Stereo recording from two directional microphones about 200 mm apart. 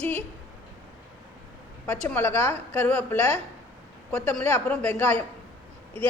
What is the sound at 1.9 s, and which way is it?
A woman's voice, 5° left (ahead or behind).